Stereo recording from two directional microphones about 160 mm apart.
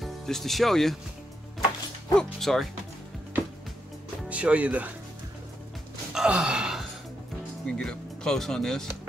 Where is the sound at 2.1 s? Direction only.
Centre (ahead or behind).